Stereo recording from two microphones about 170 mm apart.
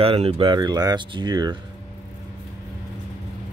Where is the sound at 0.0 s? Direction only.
35° right (ahead or behind).